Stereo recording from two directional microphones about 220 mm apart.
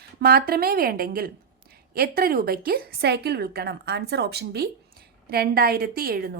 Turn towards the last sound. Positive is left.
turn(degrees=-40)  # may be behind; listen again after turning